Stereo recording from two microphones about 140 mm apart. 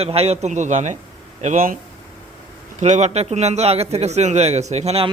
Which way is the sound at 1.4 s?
70° right (ahead or behind).